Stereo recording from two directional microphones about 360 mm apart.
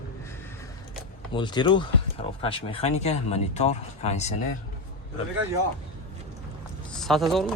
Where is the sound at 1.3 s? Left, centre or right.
Centre.